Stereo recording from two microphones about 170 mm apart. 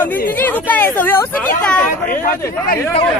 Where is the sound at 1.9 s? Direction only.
50° left (ahead or behind).